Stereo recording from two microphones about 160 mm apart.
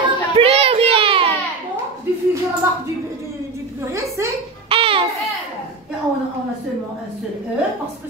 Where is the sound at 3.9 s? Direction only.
20° right (ahead or behind).